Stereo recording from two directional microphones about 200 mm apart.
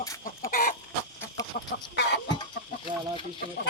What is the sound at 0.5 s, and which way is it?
Chicken, 45° left (ahead or behind).